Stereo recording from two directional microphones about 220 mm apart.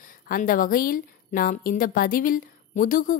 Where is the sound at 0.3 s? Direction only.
40° left (ahead or behind).